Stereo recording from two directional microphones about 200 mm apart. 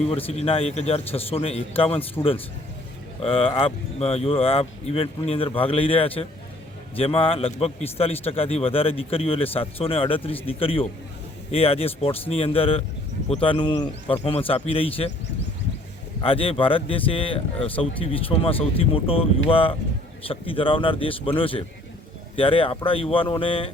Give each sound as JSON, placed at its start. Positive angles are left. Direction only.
{"t": 0.1, "sound": "speech", "side_deg": 30}
{"t": 3.2, "sound": "speech", "side_deg": 25}
{"t": 16.2, "sound": "speech", "side_deg": 25}